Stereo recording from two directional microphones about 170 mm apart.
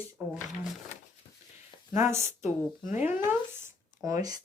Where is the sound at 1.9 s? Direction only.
15° right (ahead or behind).